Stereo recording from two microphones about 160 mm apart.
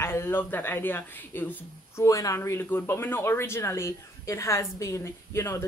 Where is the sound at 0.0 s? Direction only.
15° left (ahead or behind).